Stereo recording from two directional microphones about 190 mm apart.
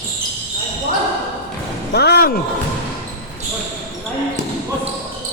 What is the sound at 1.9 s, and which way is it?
Speech, 60° left (ahead or behind).